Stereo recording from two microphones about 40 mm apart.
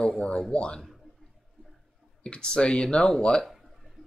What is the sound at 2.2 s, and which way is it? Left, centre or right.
Speech, left.